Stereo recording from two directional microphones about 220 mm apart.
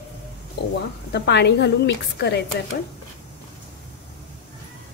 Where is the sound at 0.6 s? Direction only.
50° left (ahead or behind).